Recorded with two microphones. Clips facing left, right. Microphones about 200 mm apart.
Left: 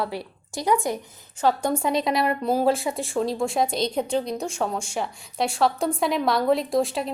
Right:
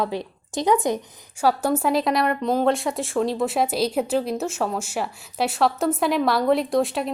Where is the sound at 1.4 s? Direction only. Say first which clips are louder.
Right 2 dB; 5° right (ahead or behind).